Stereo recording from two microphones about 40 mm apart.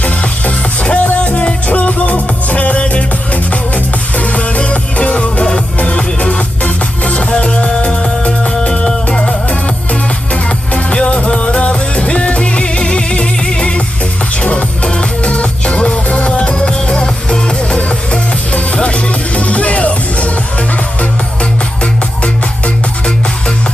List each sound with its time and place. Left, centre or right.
0.0 s music: left
4.1 s music: left
22.2 s music: left